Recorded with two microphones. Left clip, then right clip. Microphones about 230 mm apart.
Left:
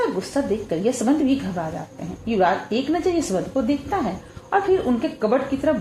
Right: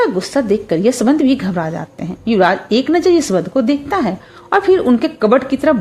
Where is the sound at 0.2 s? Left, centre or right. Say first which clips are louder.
Right 8 dB; right.